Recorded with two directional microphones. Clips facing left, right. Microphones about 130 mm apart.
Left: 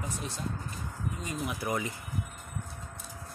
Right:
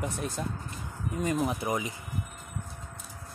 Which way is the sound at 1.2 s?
55° right (ahead or behind).